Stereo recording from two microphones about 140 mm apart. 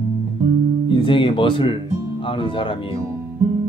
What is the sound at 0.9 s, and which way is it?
Speech, 35° left (ahead or behind).